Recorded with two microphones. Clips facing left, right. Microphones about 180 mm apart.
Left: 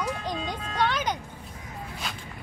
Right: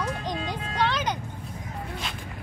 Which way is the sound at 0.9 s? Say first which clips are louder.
Even; 10° left (ahead or behind).